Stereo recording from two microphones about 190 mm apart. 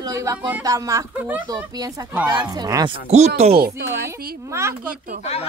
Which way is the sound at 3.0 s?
35° right (ahead or behind).